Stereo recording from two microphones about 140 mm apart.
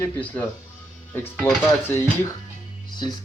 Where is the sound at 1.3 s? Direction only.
Centre (ahead or behind).